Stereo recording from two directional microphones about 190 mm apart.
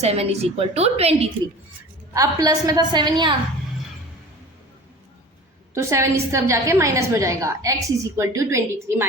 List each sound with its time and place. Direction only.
0.0 s a woman's voice: 35° right (ahead or behind)
2.1 s a woman's voice: 20° right (ahead or behind)
5.7 s a woman's voice: 15° right (ahead or behind)